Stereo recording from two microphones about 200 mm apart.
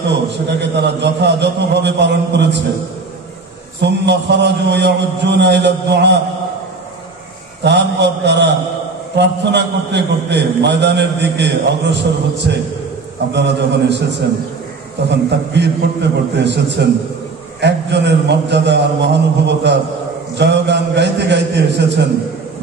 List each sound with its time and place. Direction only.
0.1 s a man's voice: 60° right (ahead or behind)
3.8 s a man's voice: 60° right (ahead or behind)
7.6 s a man's voice: 60° right (ahead or behind)
15.0 s a man's voice: 60° right (ahead or behind)
20.3 s a sound: 60° right (ahead or behind)